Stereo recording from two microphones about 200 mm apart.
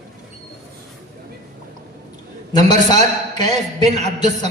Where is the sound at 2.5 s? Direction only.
20° left (ahead or behind).